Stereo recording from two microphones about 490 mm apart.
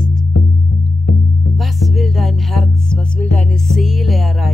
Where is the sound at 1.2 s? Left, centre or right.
Centre.